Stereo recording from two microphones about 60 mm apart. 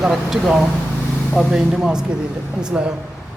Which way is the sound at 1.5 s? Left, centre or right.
Centre.